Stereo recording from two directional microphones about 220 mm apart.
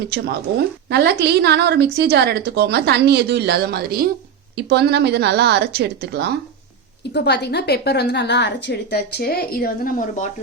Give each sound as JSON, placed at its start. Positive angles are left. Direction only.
{"t": 0.1, "sound": "a woman's voice", "side_deg": -45}
{"t": 7.1, "sound": "a woman's voice", "side_deg": 50}